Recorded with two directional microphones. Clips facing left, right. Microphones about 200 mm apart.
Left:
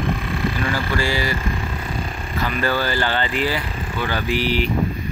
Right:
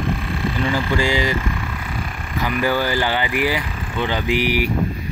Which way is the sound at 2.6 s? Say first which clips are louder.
Right 2 dB; 15° right (ahead or behind).